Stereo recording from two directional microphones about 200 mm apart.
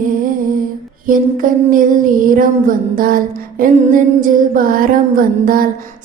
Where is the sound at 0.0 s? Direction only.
40° right (ahead or behind).